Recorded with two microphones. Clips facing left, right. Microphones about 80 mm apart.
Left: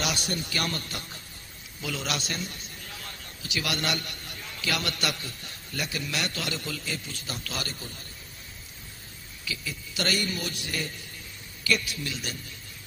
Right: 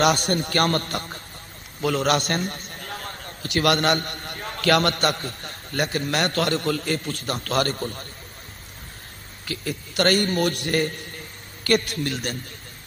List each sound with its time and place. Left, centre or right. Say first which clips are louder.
0.0 s a man's voice: right 11 dB; right
9.4 s a man's voice: right 7 dB; right